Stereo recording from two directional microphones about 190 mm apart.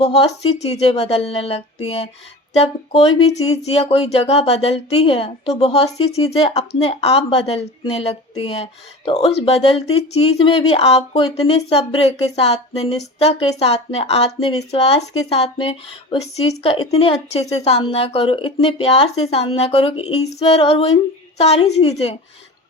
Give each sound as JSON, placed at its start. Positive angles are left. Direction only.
{"t": 0.0, "sound": "speech", "side_deg": 30}